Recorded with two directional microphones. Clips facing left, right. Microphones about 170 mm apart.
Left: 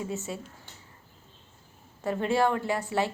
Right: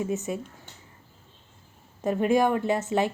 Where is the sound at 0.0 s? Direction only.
20° right (ahead or behind).